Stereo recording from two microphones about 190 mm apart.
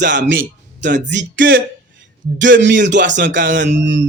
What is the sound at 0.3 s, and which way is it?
Speech, 70° right (ahead or behind).